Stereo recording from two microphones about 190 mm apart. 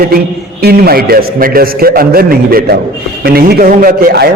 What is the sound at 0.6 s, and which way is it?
A man's voice, 55° right (ahead or behind).